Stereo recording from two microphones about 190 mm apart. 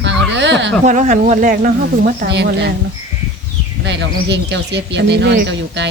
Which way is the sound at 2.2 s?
65° right (ahead or behind).